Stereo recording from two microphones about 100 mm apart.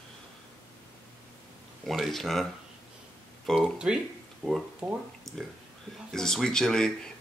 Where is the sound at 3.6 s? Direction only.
10° right (ahead or behind).